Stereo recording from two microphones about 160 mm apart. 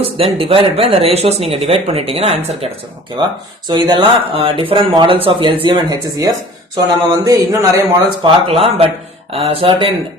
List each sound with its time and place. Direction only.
0.0 s speech: 35° right (ahead or behind)
3.7 s speech: 30° right (ahead or behind)